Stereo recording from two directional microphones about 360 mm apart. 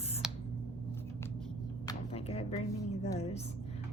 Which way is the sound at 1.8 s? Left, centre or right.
Centre.